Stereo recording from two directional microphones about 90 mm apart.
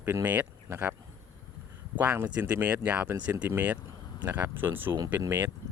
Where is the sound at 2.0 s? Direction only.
20° right (ahead or behind).